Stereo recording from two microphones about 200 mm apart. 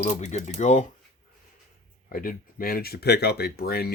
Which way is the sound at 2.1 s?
45° left (ahead or behind).